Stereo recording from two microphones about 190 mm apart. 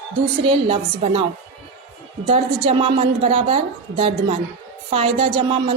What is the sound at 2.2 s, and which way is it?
A woman's voice, 30° right (ahead or behind).